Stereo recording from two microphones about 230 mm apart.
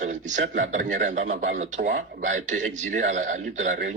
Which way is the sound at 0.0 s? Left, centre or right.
Right.